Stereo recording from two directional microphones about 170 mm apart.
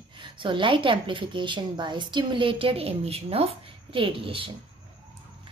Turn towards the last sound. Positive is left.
turn(degrees=-30)  # may be behind; listen again after turning